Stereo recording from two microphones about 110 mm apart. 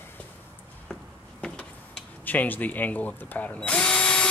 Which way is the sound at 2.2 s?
15° left (ahead or behind).